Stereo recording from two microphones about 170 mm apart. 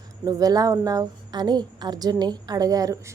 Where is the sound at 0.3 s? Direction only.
20° right (ahead or behind).